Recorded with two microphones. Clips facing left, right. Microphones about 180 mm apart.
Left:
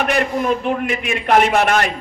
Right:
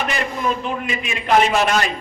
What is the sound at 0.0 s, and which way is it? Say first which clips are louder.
A man's voice: left 4 dB; 55° left (ahead or behind).